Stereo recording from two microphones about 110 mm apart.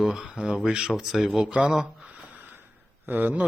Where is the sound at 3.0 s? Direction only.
15° right (ahead or behind).